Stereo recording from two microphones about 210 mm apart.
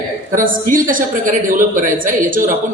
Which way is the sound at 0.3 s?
40° right (ahead or behind).